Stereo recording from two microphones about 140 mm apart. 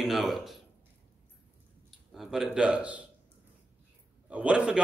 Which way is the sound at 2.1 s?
5° right (ahead or behind).